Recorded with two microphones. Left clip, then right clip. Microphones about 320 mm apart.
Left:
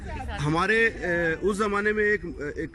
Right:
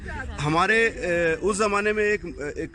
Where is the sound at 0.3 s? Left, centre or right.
Centre.